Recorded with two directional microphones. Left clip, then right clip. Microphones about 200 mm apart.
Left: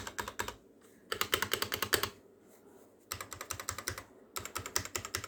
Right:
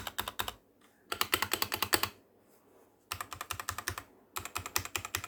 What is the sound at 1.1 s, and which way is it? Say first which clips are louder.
Computer keyboard: right 1 dB; 5° right (ahead or behind).